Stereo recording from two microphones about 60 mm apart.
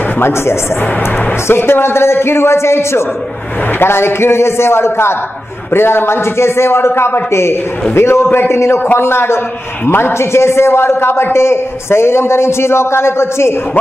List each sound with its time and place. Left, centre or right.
0.2 s a man's voice: left